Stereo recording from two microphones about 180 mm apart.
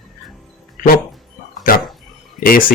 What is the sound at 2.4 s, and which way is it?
Speech, 55° left (ahead or behind).